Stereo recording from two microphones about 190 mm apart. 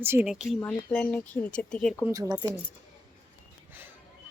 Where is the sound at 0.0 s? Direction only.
10° right (ahead or behind).